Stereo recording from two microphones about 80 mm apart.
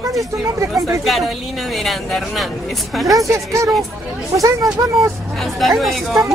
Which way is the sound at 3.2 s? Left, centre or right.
Right.